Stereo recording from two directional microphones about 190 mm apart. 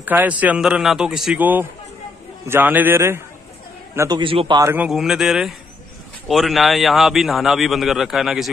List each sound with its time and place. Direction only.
0.0 s a man's voice: 10° right (ahead or behind)
4.2 s a man's voice: 25° right (ahead or behind)
4.6 s a man's voice: 5° right (ahead or behind)